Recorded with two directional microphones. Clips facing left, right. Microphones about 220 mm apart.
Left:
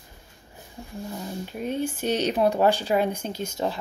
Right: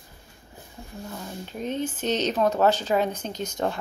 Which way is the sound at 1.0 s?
10° left (ahead or behind).